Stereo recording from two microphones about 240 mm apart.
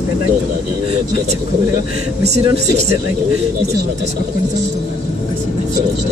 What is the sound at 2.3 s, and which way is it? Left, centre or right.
Speech, right.